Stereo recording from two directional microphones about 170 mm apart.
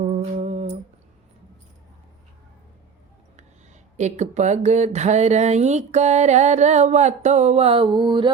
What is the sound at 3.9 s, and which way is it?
Speech, 45° right (ahead or behind).